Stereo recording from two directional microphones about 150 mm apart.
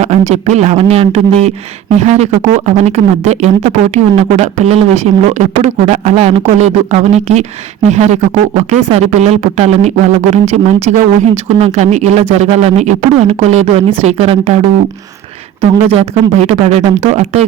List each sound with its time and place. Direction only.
0.0 s speech: 50° right (ahead or behind)
15.6 s speech: 45° right (ahead or behind)